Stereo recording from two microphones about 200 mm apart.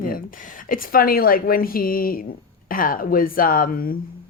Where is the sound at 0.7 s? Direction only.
45° left (ahead or behind).